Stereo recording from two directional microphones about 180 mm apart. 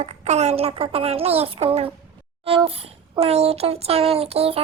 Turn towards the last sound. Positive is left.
turn(degrees=-35)  # may be behind; listen again after turning